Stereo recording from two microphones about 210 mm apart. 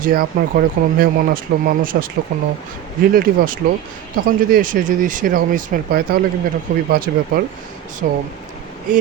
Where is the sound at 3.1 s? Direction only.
45° right (ahead or behind).